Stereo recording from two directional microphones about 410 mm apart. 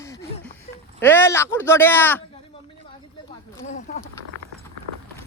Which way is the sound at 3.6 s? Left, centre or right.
Centre.